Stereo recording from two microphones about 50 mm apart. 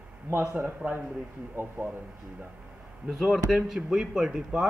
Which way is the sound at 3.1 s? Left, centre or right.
Centre.